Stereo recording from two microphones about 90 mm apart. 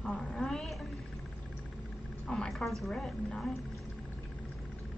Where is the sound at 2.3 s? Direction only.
10° left (ahead or behind).